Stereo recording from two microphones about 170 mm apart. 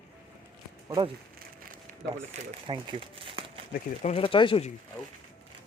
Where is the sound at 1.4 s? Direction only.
55° right (ahead or behind).